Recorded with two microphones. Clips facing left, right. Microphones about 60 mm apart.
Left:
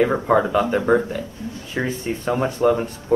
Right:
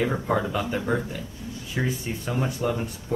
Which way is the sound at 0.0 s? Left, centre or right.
Left.